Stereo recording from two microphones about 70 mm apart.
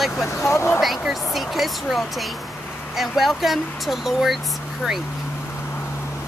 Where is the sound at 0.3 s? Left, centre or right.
Left.